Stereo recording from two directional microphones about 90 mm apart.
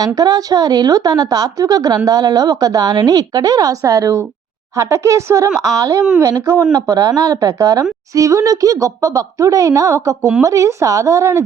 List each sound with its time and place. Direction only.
0.0 s a woman's voice: 45° right (ahead or behind)